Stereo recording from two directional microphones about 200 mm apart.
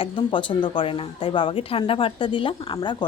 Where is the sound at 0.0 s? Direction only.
25° left (ahead or behind).